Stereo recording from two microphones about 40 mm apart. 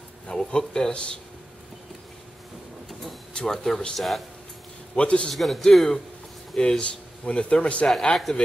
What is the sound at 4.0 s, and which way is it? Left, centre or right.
Speech, centre.